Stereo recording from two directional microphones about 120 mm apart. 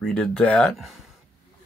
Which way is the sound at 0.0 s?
5° left (ahead or behind).